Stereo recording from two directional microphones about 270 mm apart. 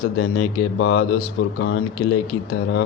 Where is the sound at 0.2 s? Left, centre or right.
Left.